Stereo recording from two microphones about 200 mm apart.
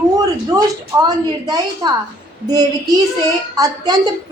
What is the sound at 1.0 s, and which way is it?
A woman's voice, 20° right (ahead or behind).